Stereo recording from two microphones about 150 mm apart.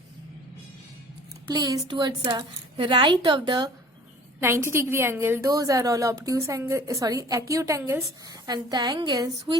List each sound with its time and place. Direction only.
1.5 s a woman's voice: 25° right (ahead or behind)
4.4 s a woman's voice: 15° right (ahead or behind)
8.3 s a woman's voice: 30° right (ahead or behind)